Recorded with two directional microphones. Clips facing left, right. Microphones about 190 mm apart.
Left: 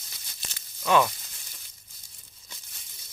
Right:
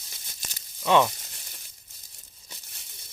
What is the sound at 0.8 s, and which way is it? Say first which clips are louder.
Sizzle: right 1 dB; 20° right (ahead or behind).